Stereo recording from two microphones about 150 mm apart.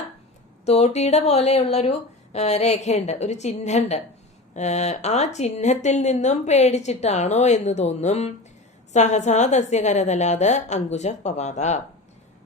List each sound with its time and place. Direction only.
0.6 s speech: 45° left (ahead or behind)